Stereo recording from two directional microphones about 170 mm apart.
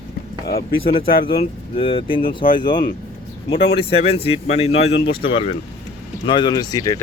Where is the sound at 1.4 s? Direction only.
30° left (ahead or behind).